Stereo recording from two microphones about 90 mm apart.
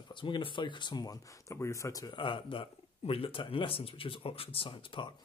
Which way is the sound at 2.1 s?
65° left (ahead or behind).